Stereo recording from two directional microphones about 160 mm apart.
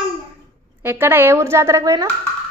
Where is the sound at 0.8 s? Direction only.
15° right (ahead or behind).